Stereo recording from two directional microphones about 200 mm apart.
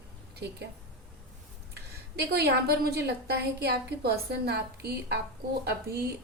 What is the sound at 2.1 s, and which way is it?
A woman's voice, 55° right (ahead or behind).